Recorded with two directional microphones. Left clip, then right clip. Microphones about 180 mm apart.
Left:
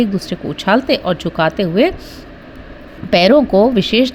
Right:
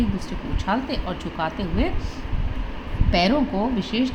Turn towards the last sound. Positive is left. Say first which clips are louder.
# left 13 dB
turn(degrees=50)  # may be behind; listen again after turning